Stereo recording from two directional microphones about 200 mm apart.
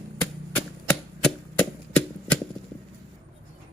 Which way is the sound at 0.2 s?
5° left (ahead or behind).